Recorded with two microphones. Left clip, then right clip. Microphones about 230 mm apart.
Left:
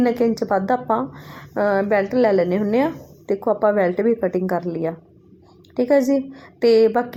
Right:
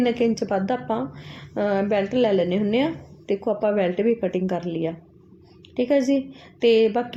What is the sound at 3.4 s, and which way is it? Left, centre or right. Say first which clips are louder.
Speech: left 5 dB; centre.